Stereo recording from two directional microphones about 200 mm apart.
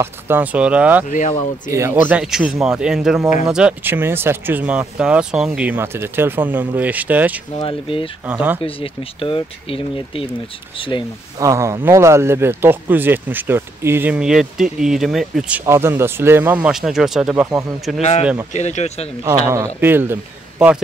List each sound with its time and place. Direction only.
0.0 s speech: 10° right (ahead or behind)
7.5 s speech: 25° left (ahead or behind)
8.3 s speech: 10° right (ahead or behind)
8.6 s speech: 25° left (ahead or behind)
11.3 s speech: 15° right (ahead or behind)
18.5 s speech: 35° left (ahead or behind)
19.2 s speech: 15° right (ahead or behind)